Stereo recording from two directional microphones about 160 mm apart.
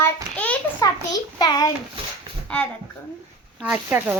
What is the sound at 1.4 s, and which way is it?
Speech, 25° left (ahead or behind).